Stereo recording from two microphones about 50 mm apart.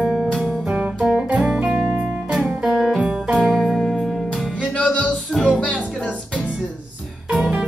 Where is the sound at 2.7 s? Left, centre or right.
Centre.